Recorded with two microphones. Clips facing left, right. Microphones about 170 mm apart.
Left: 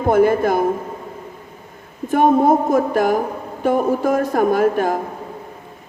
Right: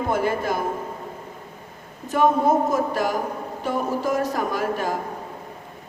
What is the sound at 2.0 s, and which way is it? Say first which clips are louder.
Speech: left 5 dB; 55° left (ahead or behind).